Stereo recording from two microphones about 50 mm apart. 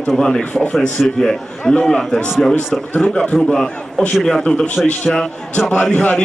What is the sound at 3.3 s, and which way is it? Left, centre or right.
Speech, centre.